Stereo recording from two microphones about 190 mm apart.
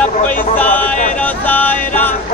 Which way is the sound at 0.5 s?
10° left (ahead or behind).